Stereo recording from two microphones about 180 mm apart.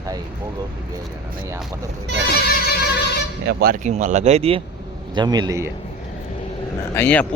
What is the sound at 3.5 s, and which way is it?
Speech, 55° right (ahead or behind).